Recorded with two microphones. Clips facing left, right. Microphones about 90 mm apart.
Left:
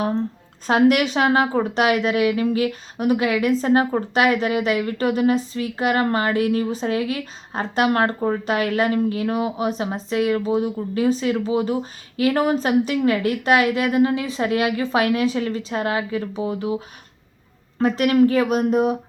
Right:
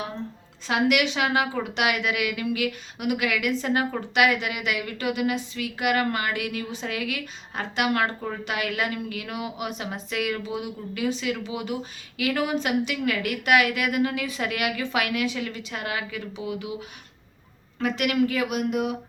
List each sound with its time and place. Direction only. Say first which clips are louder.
0.7 s speech: left 6 dB; 40° left (ahead or behind)
17.7 s speech: left 7 dB; 35° left (ahead or behind)